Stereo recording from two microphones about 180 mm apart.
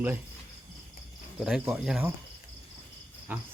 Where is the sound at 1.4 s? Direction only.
Centre (ahead or behind).